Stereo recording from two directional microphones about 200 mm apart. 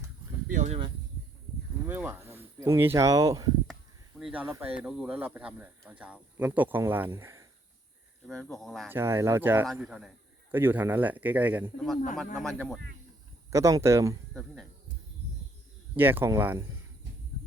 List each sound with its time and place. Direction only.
0.5 s speech: 35° right (ahead or behind)
1.9 s speech: 10° right (ahead or behind)
4.2 s speech: 5° right (ahead or behind)
8.3 s speech: 5° left (ahead or behind)
8.9 s speech: 10° right (ahead or behind)
13.5 s speech: 15° right (ahead or behind)
14.3 s speech: centre (ahead or behind)
16.0 s speech: 10° right (ahead or behind)